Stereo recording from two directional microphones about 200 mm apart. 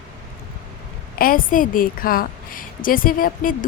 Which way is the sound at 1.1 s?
45° left (ahead or behind).